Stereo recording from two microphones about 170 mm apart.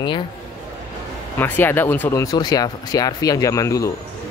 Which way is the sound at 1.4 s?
10° left (ahead or behind).